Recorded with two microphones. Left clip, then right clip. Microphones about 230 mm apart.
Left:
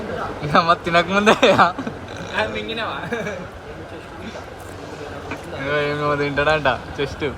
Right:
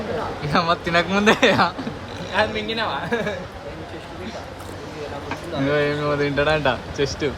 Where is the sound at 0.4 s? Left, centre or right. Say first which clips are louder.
Left 5 dB; centre.